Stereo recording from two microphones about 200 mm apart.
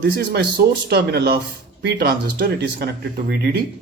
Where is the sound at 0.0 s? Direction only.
55° right (ahead or behind).